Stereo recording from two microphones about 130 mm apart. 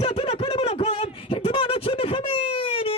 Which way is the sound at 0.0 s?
45° left (ahead or behind).